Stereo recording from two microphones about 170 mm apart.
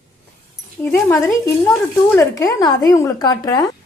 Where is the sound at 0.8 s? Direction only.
10° left (ahead or behind).